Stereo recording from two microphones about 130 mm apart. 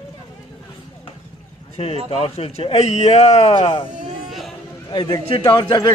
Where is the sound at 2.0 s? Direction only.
45° left (ahead or behind).